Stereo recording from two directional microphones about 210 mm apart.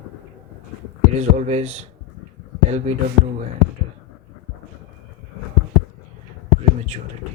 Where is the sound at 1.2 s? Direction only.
30° right (ahead or behind).